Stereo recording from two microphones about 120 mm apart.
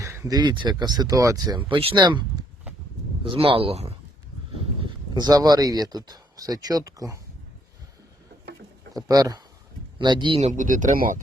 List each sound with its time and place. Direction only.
0.0 s a sound: 25° right (ahead or behind)
0.3 s speech: 40° right (ahead or behind)
3.2 s speech: 50° right (ahead or behind)
4.5 s speech: 40° right (ahead or behind)
9.0 s speech: 30° right (ahead or behind)
10.3 s speech: 80° right